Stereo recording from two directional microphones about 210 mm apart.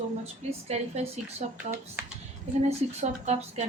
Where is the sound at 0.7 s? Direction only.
30° right (ahead or behind).